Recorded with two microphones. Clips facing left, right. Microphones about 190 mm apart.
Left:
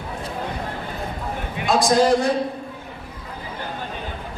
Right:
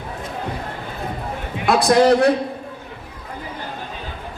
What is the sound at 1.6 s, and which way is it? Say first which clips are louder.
Speech: right 3 dB; 65° right (ahead or behind).